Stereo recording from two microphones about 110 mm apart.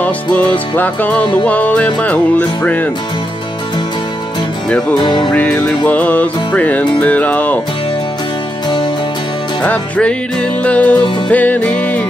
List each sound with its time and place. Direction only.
0.0 s music: 15° left (ahead or behind)
4.6 s music: 5° left (ahead or behind)
4.9 s music: 45° left (ahead or behind)
5.3 s music: 15° left (ahead or behind)
9.6 s music: 10° left (ahead or behind)